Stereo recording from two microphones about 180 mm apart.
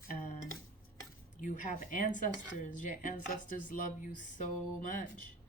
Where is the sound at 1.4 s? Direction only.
45° left (ahead or behind).